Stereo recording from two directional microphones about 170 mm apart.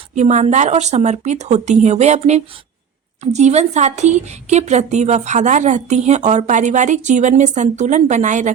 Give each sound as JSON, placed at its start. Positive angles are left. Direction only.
{"t": 0.2, "sound": "a woman's voice", "side_deg": -45}